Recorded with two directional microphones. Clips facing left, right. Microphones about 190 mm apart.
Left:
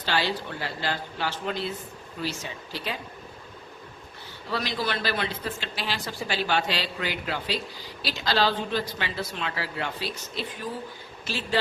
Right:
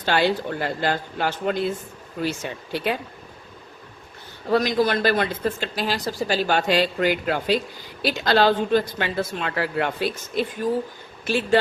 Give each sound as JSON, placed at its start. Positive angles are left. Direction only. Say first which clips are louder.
{"t": 0.0, "sound": "a woman's voice", "louder": "right 7 dB", "side_deg": -50}
{"t": 4.4, "sound": "a woman's voice", "louder": "right 10 dB", "side_deg": -45}